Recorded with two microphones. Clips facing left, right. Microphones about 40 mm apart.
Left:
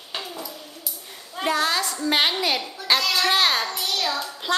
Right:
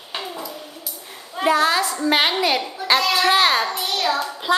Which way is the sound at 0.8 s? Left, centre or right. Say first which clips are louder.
Right 3 dB; centre.